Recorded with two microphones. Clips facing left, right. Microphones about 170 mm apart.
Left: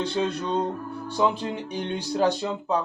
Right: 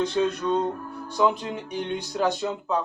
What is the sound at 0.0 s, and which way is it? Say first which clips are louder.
Speech: right 2 dB; 30° left (ahead or behind).